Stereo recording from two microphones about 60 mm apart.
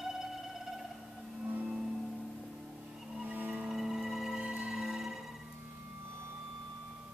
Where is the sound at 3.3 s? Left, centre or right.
Right.